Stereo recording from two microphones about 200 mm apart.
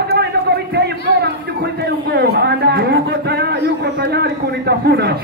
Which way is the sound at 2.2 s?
55° right (ahead or behind).